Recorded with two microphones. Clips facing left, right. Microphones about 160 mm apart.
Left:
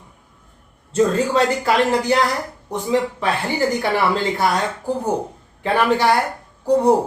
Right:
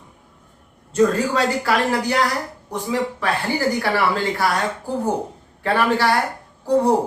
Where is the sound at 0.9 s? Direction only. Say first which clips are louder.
Left 1 dB; 25° left (ahead or behind).